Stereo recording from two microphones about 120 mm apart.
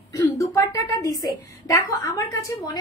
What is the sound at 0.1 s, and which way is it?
A woman's voice, 25° left (ahead or behind).